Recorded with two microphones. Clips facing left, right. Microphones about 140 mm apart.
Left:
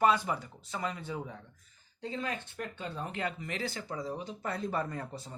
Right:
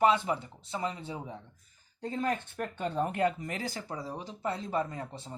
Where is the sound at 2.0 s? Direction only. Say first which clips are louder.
Right 5 dB; 45° right (ahead or behind).